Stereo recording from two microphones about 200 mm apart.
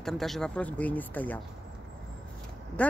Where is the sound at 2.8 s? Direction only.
5° left (ahead or behind).